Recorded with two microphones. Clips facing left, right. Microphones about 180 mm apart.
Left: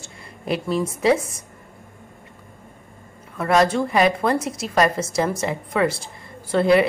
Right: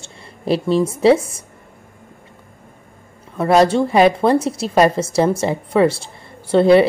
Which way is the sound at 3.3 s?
30° right (ahead or behind).